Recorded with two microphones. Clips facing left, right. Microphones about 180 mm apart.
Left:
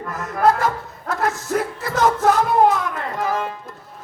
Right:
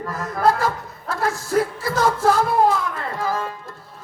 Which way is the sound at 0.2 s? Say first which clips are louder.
Left 2 dB; 30° right (ahead or behind).